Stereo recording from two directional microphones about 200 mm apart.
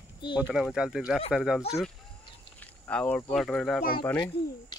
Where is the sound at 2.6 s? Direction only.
5° left (ahead or behind).